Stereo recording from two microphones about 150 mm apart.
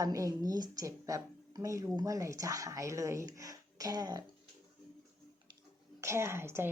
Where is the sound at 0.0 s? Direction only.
20° right (ahead or behind).